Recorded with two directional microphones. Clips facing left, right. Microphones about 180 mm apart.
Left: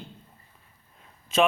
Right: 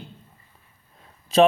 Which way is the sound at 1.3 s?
35° right (ahead or behind).